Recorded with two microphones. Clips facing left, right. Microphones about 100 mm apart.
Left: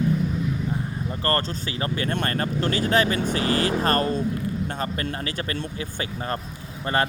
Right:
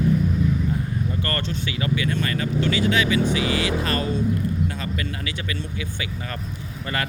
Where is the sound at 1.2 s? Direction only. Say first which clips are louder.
Left 2 dB; 35° left (ahead or behind).